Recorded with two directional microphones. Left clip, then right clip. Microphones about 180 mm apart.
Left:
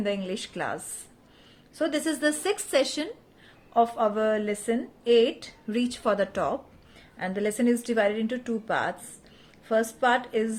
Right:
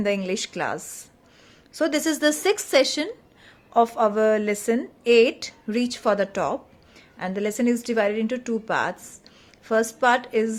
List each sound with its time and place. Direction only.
0.0 s a woman's voice: 30° right (ahead or behind)